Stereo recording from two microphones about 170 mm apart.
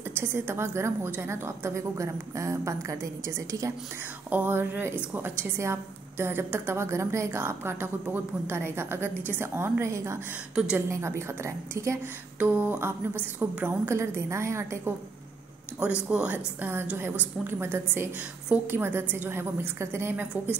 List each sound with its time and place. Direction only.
0.2 s a woman's voice: 15° right (ahead or behind)
16.1 s a woman's voice: 10° right (ahead or behind)